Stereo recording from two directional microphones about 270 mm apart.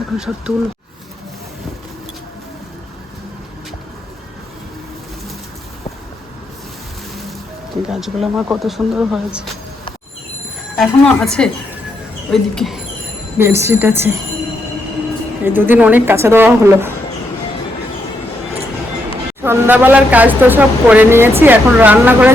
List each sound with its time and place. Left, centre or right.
0.5 s speech: centre
7.9 s speech: centre
10.8 s speech: centre
15.4 s speech: centre
19.4 s speech: centre